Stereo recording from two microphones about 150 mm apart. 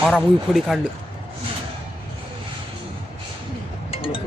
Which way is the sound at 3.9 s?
40° left (ahead or behind).